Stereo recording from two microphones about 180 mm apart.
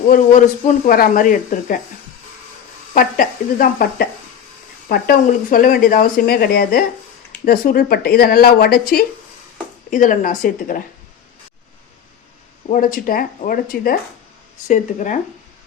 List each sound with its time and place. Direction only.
0.1 s a man's voice: 45° left (ahead or behind)
2.9 s a man's voice: 50° left (ahead or behind)
9.9 s a man's voice: 45° left (ahead or behind)
12.6 s a man's voice: 50° left (ahead or behind)